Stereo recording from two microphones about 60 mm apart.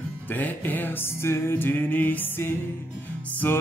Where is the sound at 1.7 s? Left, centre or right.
Left.